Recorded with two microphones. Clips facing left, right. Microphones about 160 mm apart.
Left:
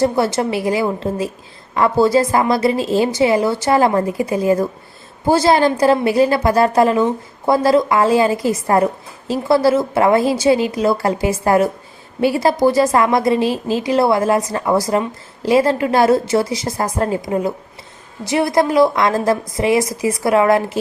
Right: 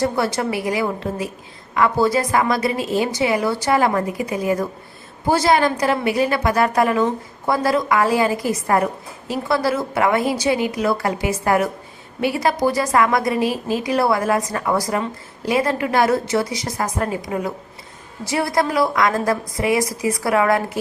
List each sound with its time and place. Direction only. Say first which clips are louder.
0.0 s a woman's voice: left 4 dB; 25° left (ahead or behind)